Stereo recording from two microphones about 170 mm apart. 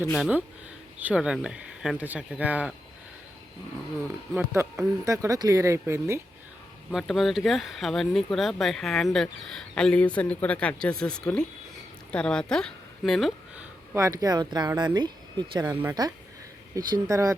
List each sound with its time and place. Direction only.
0.1 s speech: 5° right (ahead or behind)
4.4 s speech: 15° right (ahead or behind)
6.9 s speech: centre (ahead or behind)
13.9 s speech: 20° right (ahead or behind)